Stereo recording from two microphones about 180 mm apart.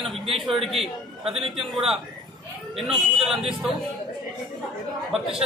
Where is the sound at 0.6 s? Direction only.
Centre (ahead or behind).